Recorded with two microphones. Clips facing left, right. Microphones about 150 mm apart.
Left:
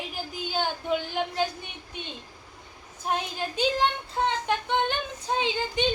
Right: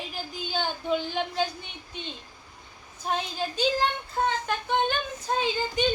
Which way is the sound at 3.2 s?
60° left (ahead or behind).